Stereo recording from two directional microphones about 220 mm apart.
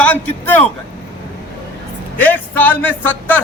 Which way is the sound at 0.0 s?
5° left (ahead or behind).